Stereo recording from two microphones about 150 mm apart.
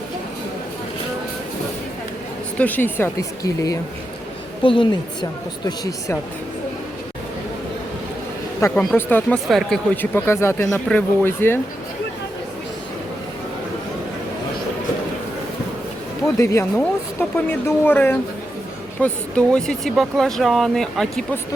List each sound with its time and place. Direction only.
2.6 s speech: 10° left (ahead or behind)
4.6 s a woman's voice: 35° left (ahead or behind)
8.7 s speech: centre (ahead or behind)
9.0 s speech: 15° left (ahead or behind)
9.5 s speech: centre (ahead or behind)
16.2 s speech: 20° left (ahead or behind); by 21.2 s 5° left (ahead or behind)